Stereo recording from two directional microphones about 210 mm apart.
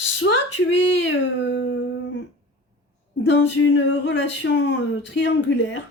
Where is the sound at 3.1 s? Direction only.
60° left (ahead or behind).